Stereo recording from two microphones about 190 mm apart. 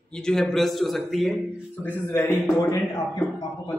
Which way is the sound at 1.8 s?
10° left (ahead or behind).